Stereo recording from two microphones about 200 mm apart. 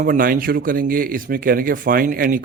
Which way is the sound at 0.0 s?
45° right (ahead or behind).